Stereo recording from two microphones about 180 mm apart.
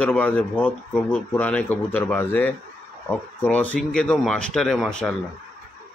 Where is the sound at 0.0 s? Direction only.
10° left (ahead or behind).